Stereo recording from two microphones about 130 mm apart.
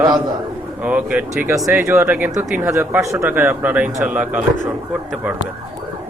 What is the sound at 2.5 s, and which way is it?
Speech, 5° right (ahead or behind).